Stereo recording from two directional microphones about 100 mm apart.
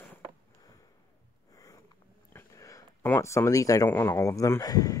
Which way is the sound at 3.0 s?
25° left (ahead or behind).